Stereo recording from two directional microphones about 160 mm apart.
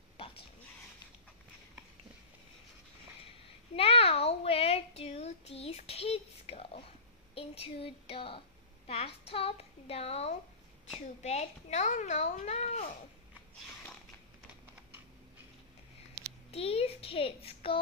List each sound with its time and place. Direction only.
3.7 s child singing: 40° left (ahead or behind)
7.3 s a sound: 35° left (ahead or behind)
8.8 s a woman's voice: 35° left (ahead or behind)
16.5 s a woman's voice: 40° left (ahead or behind)